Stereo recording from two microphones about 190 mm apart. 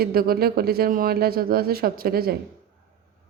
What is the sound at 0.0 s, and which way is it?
Speech, 50° right (ahead or behind).